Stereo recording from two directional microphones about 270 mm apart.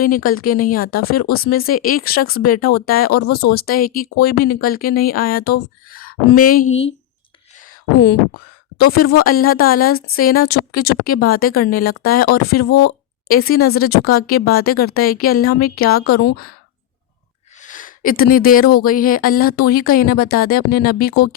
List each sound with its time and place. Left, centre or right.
0.0 s a woman's voice: left
8.8 s a woman's voice: left
17.6 s a sound: left
18.8 s a woman's voice: left